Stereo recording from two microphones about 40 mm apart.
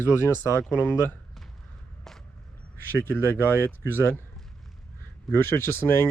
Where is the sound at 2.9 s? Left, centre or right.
Right.